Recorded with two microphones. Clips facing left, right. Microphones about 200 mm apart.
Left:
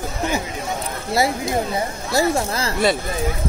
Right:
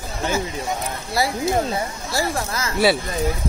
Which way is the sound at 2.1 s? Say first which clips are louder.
Left 5 dB; 25° left (ahead or behind).